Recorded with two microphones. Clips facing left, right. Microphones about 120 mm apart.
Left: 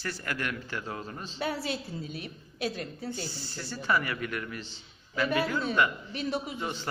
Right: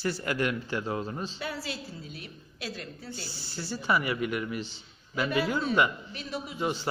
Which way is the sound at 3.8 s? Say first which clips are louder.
Right 2 dB; 15° right (ahead or behind).